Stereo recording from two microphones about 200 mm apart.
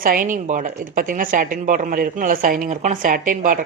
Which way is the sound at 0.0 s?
45° right (ahead or behind).